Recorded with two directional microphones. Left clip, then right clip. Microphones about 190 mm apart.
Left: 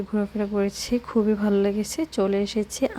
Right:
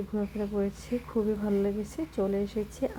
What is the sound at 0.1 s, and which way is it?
Speech, 25° left (ahead or behind).